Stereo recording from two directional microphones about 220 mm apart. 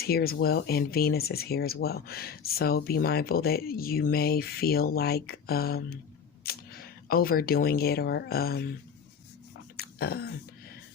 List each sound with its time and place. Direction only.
0.0 s speech: 45° left (ahead or behind)
9.7 s throat clearing: 45° left (ahead or behind)